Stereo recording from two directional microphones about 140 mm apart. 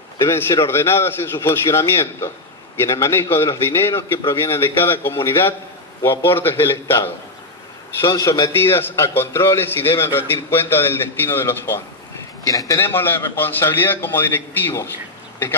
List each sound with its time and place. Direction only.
0.2 s a man's voice: 20° left (ahead or behind)